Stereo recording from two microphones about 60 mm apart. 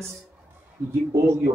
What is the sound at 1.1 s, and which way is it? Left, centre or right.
Speech, right.